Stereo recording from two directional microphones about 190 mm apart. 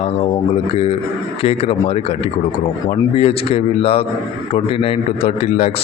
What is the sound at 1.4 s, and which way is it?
Speech, 30° left (ahead or behind).